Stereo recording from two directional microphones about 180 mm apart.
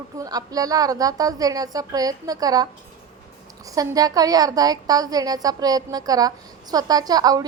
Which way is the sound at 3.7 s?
20° right (ahead or behind).